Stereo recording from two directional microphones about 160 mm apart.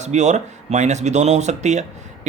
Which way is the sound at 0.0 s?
45° right (ahead or behind).